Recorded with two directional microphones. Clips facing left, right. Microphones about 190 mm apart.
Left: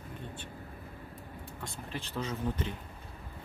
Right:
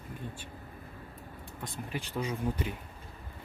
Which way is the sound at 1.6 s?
10° right (ahead or behind).